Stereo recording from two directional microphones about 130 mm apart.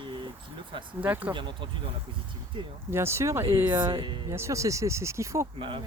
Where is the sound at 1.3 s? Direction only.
40° right (ahead or behind).